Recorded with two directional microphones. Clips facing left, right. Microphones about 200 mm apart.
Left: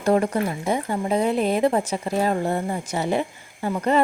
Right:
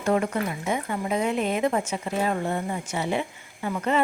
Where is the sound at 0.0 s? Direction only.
35° left (ahead or behind).